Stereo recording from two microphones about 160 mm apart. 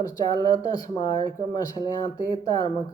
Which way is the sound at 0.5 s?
25° left (ahead or behind).